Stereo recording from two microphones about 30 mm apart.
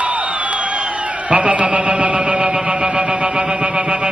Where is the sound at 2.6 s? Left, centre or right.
Right.